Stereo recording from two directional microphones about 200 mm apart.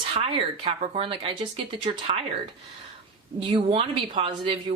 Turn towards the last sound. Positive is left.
turn(degrees=-25)  # may be behind; listen again after turning